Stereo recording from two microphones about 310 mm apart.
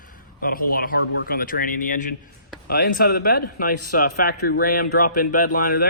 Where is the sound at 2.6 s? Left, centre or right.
Left.